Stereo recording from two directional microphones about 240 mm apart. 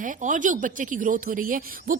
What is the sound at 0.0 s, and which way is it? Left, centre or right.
Speech, right.